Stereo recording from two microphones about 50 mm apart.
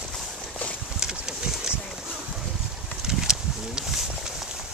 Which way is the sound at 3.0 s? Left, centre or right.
Centre.